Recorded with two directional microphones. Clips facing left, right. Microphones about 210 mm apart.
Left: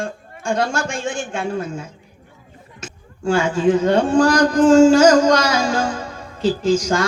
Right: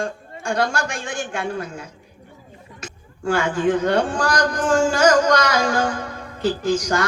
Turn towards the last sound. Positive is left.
turn(degrees=25)  # may be behind; listen again after turning